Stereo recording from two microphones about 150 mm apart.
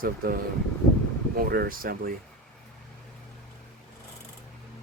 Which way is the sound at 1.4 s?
80° right.